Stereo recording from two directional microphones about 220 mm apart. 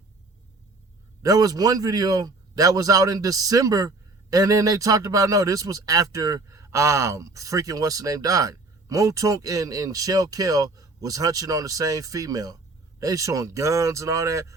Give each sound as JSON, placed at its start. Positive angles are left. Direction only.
{"t": 1.2, "sound": "a man's voice", "side_deg": -15}